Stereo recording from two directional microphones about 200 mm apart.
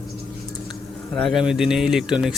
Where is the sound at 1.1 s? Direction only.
Centre (ahead or behind).